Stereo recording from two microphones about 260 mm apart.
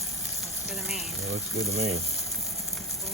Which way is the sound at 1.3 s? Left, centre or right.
Right.